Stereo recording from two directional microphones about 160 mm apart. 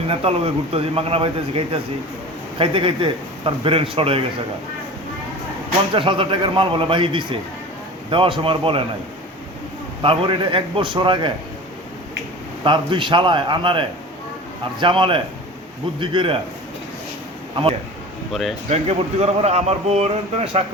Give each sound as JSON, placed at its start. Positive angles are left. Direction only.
{"t": 0.1, "sound": "a man's voice", "side_deg": -35}
{"t": 5.9, "sound": "a man's voice", "side_deg": -30}
{"t": 10.0, "sound": "a man's voice", "side_deg": -35}
{"t": 12.6, "sound": "a man's voice", "side_deg": -30}
{"t": 18.3, "sound": "speech", "side_deg": 0}
{"t": 18.7, "sound": "a man's voice", "side_deg": -40}